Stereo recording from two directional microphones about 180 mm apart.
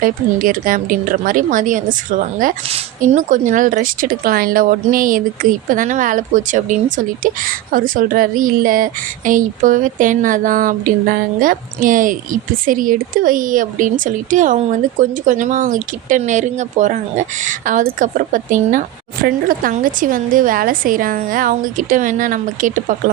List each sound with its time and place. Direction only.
0.0 s speech: 50° right (ahead or behind)